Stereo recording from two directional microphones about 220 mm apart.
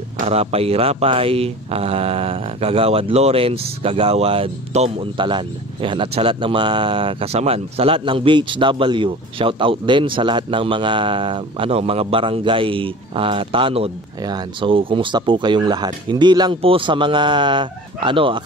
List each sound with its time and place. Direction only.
0.3 s speech: 25° right (ahead or behind)